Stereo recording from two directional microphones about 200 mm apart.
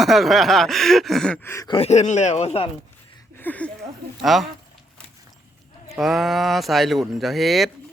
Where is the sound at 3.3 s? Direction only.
10° left (ahead or behind).